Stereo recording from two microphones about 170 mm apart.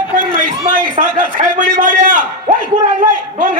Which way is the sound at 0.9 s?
50° right (ahead or behind).